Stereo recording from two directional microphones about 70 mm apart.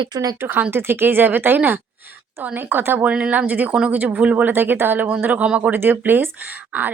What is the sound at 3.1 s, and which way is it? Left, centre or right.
Speech, centre.